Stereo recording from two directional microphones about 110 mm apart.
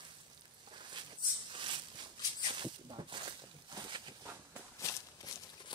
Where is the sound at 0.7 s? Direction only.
45° right (ahead or behind).